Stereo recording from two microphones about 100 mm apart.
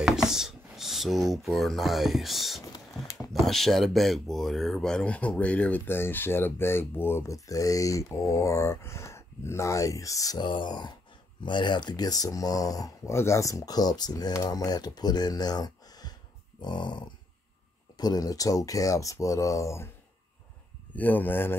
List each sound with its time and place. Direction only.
0.0 s speech: 5° right (ahead or behind)
2.7 s a sound: 35° left (ahead or behind)
3.3 s speech: centre (ahead or behind)
5.9 s speech: 25° left (ahead or behind)
10.4 s speech: 50° left (ahead or behind); by 19.9 s 30° left (ahead or behind)
20.9 s speech: 15° left (ahead or behind)